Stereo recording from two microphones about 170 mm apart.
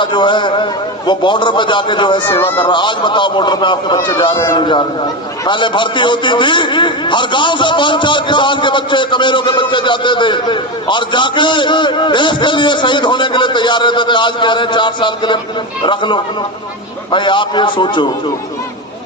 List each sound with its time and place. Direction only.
0.0 s a man's voice: 25° left (ahead or behind)